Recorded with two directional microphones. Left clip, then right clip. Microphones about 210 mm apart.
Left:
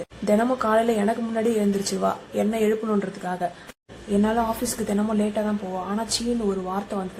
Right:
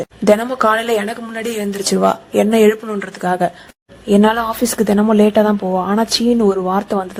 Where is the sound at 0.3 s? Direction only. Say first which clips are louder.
Right 8 dB; 40° right (ahead or behind).